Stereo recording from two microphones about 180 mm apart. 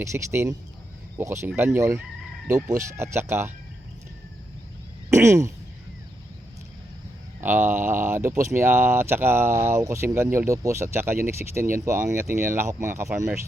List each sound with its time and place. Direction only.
0.0 s speech: 15° right (ahead or behind)
5.1 s speech: 15° right (ahead or behind)
7.4 s speech: 10° right (ahead or behind)